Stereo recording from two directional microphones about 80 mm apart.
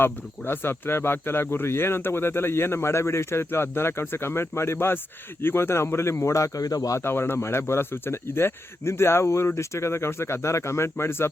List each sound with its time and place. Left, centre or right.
0.0 s speech: left
7.0 s speech: left